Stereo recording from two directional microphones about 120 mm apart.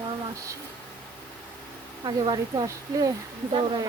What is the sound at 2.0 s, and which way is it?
Speech, 35° right (ahead or behind).